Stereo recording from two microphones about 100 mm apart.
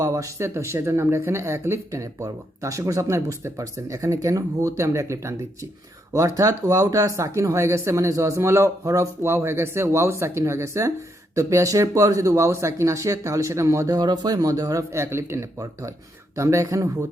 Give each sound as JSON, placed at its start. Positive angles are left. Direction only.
{"t": 0.0, "sound": "a man's voice", "side_deg": -35}